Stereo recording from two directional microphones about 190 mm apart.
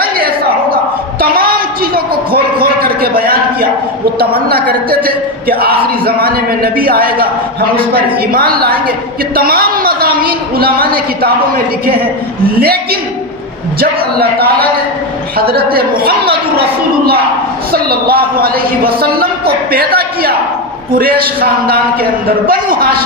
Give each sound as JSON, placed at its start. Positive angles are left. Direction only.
{"t": 0.0, "sound": "a sound", "side_deg": -50}
{"t": 4.2, "sound": "a woman's voice", "side_deg": -50}
{"t": 17.7, "sound": "a woman's voice", "side_deg": -50}
{"t": 22.4, "sound": "a woman's voice", "side_deg": -50}